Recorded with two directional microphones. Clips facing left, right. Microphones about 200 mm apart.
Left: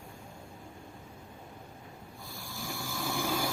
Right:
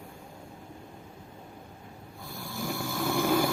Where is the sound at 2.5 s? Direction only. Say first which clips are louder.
Right 7 dB; 60° right (ahead or behind).